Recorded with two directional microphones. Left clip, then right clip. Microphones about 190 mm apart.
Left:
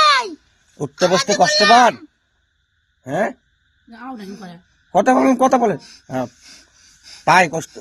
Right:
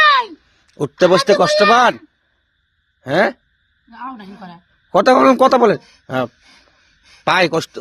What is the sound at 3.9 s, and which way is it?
Speech, centre (ahead or behind).